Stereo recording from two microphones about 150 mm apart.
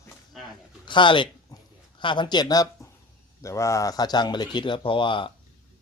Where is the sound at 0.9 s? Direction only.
30° left (ahead or behind).